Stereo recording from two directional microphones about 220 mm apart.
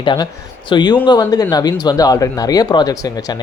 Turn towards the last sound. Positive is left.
turn(degrees=20)  # may be behind; listen again after turning